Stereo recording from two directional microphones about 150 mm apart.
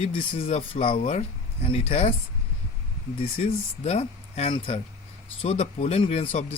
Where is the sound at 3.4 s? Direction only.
45° left (ahead or behind).